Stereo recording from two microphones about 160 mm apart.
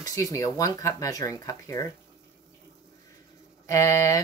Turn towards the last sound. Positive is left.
turn(degrees=20)  # may be behind; listen again after turning